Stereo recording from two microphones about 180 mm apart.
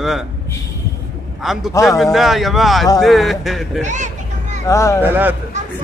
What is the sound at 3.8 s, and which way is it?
Vehicle, 40° right (ahead or behind).